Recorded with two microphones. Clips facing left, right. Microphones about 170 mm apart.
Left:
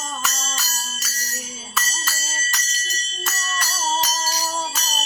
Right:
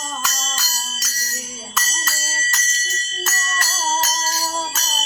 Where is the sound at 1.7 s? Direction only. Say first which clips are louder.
Even; centre (ahead or behind).